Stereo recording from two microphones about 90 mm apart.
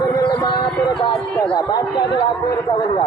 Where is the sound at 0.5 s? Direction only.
60° left (ahead or behind).